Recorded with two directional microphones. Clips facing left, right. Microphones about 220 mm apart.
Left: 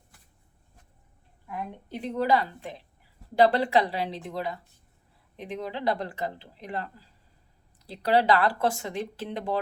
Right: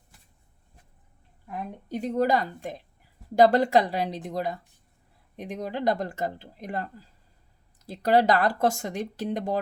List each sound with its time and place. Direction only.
1.5 s a woman's voice: 45° right (ahead or behind)